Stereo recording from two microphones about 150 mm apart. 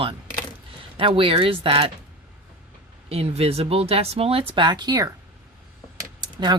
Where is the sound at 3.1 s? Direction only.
40° right (ahead or behind); by 5.1 s 25° right (ahead or behind).